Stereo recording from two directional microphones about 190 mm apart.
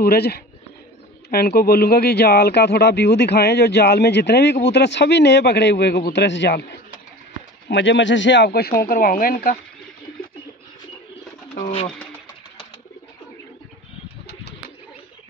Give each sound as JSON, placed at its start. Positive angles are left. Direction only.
{"t": 0.0, "sound": "speech", "side_deg": 55}